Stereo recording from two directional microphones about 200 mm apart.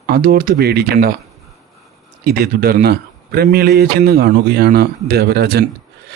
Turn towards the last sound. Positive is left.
turn(degrees=-55)  # may be behind; listen again after turning